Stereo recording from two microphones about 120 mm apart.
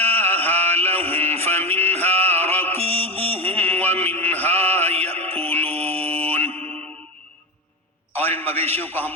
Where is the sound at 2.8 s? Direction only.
55° right (ahead or behind).